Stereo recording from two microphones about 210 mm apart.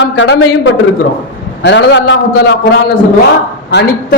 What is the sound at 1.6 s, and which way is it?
Speech, 55° left (ahead or behind).